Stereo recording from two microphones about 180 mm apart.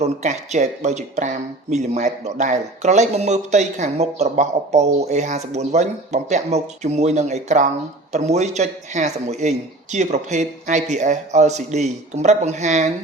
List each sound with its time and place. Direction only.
0.0 s speech: 40° right (ahead or behind)